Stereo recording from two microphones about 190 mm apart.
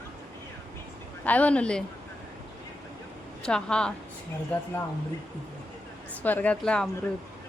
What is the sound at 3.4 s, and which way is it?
Speech, 5° left (ahead or behind).